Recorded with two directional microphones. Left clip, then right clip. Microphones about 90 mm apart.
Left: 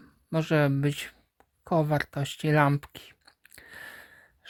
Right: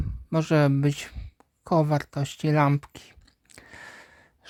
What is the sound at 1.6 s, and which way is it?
Speech, 50° right (ahead or behind).